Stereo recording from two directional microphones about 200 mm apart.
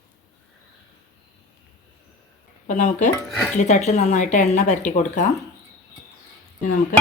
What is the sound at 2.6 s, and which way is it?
Speech, 40° left (ahead or behind).